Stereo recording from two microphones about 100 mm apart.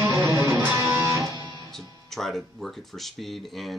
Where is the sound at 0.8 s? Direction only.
30° right (ahead or behind).